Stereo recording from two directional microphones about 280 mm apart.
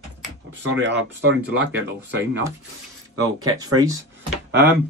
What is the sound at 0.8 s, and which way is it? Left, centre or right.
Speech, right.